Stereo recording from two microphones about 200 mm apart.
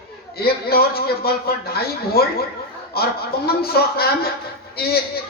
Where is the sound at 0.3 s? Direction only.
50° left (ahead or behind).